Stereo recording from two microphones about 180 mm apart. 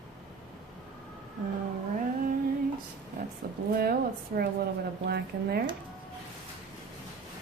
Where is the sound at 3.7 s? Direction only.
60° right (ahead or behind).